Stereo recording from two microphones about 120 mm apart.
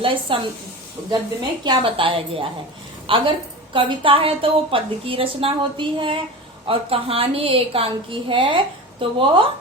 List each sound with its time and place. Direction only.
0.3 s a woman's voice: 45° right (ahead or behind)
1.6 s a woman's voice: 45° right (ahead or behind)